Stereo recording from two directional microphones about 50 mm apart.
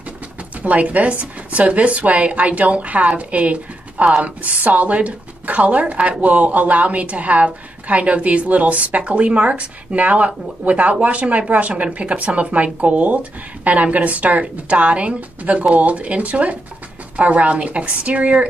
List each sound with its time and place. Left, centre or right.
0.6 s a woman's voice: right